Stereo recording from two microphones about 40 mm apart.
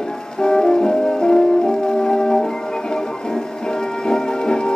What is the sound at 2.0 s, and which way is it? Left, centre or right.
Music, centre.